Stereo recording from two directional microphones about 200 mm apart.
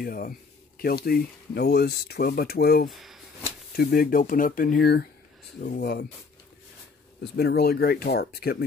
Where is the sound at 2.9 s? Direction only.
Centre (ahead or behind).